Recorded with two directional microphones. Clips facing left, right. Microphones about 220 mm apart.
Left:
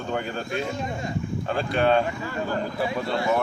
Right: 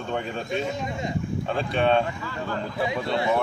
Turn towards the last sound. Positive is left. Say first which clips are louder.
# even
turn(degrees=0)  # may be behind; listen again after turning